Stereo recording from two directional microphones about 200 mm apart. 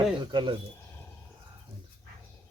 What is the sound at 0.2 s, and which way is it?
Speech, 20° right (ahead or behind).